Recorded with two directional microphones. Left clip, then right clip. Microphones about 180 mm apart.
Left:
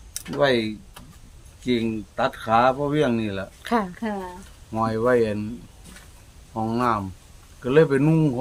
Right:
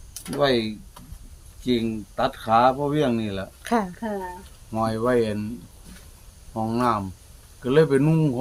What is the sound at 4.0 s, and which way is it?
Speech, 30° left (ahead or behind).